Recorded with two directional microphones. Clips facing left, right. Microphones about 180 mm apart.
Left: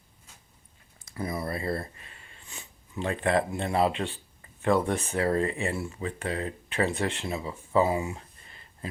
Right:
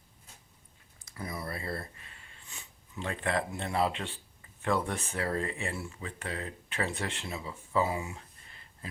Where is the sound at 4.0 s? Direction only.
40° left (ahead or behind).